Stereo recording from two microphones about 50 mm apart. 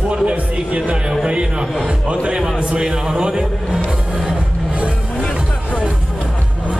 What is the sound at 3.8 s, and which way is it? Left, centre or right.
Music, centre.